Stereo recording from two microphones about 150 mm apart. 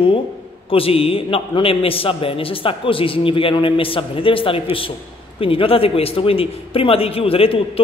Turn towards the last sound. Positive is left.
turn(degrees=40)  # may be behind; listen again after turning